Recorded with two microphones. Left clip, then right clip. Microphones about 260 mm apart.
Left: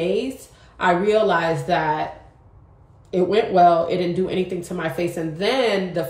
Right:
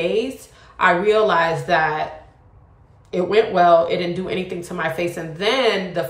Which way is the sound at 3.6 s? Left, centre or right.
Right.